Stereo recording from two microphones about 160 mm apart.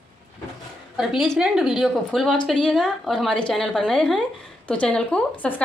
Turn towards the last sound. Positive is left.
turn(degrees=10)  # may be behind; listen again after turning